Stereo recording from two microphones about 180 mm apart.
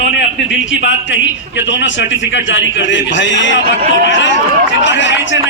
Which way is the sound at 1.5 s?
90° left.